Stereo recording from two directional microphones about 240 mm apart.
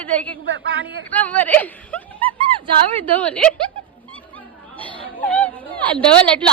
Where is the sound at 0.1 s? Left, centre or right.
Centre.